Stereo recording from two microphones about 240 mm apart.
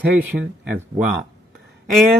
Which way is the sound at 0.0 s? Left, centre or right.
Right.